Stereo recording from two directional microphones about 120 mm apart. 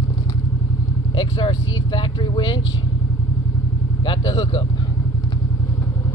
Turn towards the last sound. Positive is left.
turn(degrees=40)  # may be behind; listen again after turning